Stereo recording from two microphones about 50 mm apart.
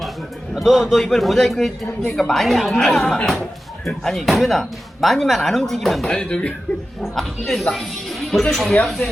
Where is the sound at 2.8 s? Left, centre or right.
Centre.